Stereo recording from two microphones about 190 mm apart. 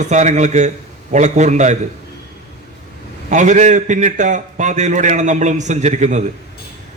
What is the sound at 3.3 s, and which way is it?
A man's voice, 40° right (ahead or behind).